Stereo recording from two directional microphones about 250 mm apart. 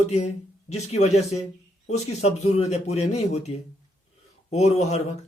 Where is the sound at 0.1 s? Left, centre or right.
Left.